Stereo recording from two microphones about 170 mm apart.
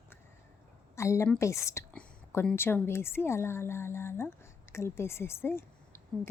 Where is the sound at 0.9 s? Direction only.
15° left (ahead or behind).